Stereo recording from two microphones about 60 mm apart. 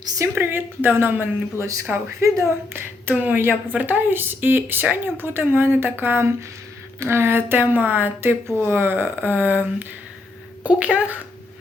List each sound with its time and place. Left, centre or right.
0.3 s speech: right
1.5 s speech: right
2.7 s a woman's voice: right